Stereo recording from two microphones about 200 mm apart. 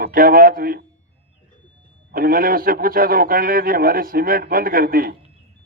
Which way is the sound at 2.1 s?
45° right (ahead or behind).